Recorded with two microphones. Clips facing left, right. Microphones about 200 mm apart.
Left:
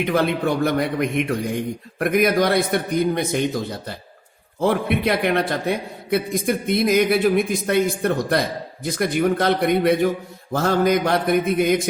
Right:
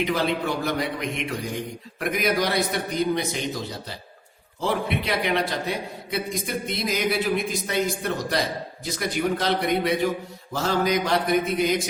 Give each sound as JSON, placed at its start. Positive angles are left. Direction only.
{"t": 0.0, "sound": "a man's voice", "side_deg": 55}